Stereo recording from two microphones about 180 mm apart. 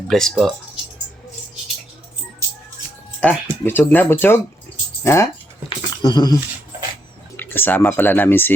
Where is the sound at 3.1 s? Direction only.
10° left (ahead or behind).